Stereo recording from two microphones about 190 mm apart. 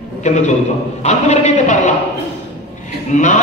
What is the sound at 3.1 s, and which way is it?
Speech, 40° left (ahead or behind).